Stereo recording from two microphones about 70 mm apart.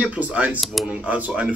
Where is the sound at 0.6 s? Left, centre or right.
Centre.